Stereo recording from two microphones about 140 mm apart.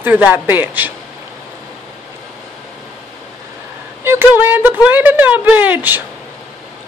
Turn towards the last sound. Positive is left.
turn(degrees=-10)  # may be behind; listen again after turning